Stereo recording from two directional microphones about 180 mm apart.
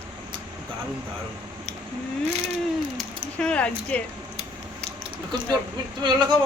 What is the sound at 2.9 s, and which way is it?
Speech, 5° left (ahead or behind).